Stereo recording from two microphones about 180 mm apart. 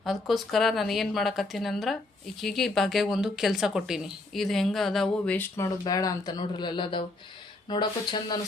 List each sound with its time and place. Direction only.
0.0 s speech: centre (ahead or behind)
5.8 s speech: 20° left (ahead or behind)